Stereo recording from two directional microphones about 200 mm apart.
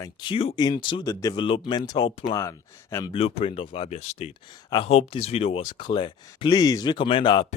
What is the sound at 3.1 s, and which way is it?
Speech, 30° left (ahead or behind).